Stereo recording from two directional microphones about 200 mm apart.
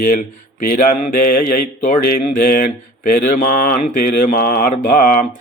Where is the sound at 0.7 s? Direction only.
40° left (ahead or behind).